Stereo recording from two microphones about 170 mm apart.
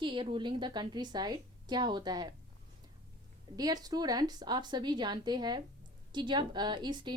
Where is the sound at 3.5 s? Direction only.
20° right (ahead or behind).